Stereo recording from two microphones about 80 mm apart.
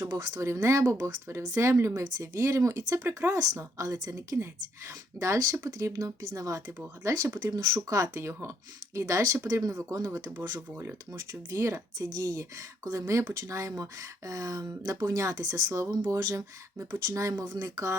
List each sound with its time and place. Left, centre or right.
0.1 s speech: right
3.3 s speech: right
4.1 s speech: right
5.2 s speech: right
10.8 s speech: right
11.3 s speech: right
17.4 s speech: right